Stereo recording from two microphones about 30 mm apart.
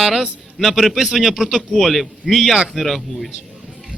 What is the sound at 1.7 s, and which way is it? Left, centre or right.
A man's voice, centre.